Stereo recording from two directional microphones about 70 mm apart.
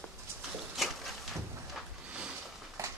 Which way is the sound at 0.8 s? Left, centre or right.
Centre.